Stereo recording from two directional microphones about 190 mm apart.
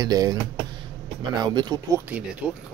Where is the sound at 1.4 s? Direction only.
25° right (ahead or behind).